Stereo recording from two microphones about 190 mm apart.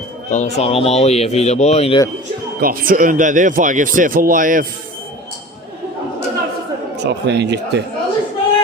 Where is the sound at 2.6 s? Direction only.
50° right (ahead or behind).